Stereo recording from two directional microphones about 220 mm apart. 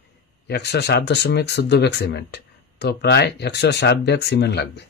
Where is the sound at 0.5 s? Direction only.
50° left (ahead or behind).